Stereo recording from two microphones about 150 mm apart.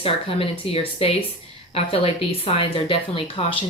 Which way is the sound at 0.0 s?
40° left (ahead or behind).